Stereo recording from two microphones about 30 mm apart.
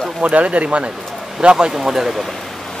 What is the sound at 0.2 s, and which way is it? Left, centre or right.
Speech, right.